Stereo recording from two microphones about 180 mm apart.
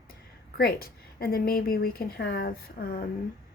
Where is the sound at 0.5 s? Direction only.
55° left (ahead or behind).